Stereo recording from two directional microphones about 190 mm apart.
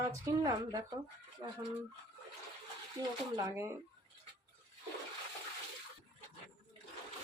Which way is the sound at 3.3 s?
15° right (ahead or behind).